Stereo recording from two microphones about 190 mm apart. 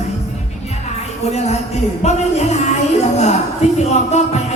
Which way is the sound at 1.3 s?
35° left (ahead or behind).